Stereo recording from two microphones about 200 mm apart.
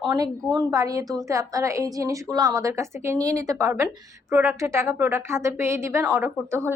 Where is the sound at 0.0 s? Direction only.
20° right (ahead or behind).